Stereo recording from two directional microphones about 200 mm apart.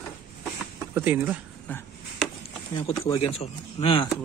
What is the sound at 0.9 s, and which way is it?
Speech, 10° right (ahead or behind).